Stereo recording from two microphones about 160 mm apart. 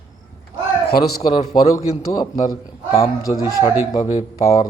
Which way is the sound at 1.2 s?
25° left (ahead or behind).